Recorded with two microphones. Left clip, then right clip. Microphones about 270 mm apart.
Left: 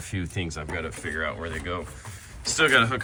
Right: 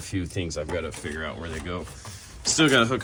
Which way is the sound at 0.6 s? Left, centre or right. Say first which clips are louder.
Right 3 dB; centre.